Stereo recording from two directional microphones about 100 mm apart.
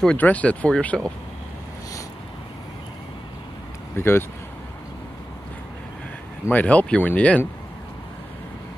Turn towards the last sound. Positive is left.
turn(degrees=15)  # may be behind; listen again after turning